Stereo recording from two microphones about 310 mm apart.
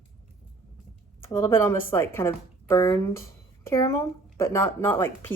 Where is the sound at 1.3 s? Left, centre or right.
Centre.